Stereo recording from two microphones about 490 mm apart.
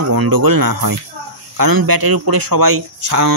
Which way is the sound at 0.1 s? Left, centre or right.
Right.